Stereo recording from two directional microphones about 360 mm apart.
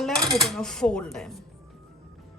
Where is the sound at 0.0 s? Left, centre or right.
Centre.